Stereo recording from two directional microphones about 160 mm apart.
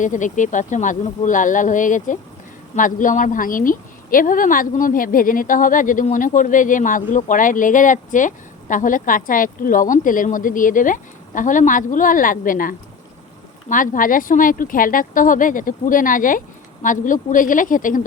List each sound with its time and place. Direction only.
0.0 s a woman's voice: 50° left (ahead or behind)